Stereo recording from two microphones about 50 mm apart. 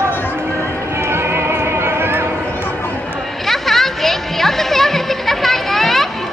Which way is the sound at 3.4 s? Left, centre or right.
Centre.